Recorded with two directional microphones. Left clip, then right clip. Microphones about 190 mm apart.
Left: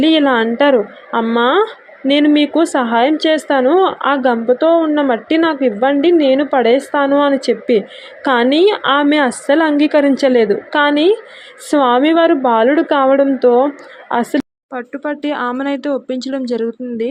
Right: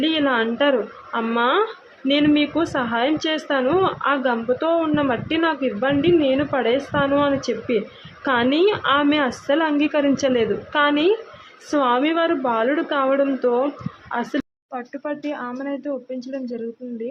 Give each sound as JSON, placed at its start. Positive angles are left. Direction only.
{"t": 0.0, "sound": "a woman's voice", "side_deg": 30}
{"t": 14.7, "sound": "a woman's voice", "side_deg": 20}